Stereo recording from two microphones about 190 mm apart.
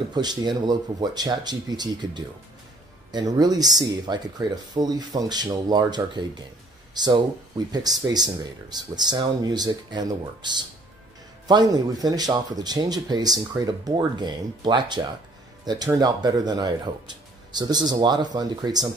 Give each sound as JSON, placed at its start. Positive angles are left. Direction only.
{"t": 0.1, "sound": "speech", "side_deg": -20}